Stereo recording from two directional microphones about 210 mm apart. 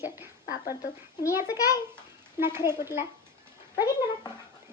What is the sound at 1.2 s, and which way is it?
Speech, 10° right (ahead or behind).